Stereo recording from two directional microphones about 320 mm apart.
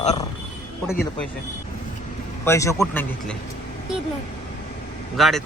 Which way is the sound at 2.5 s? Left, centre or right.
Centre.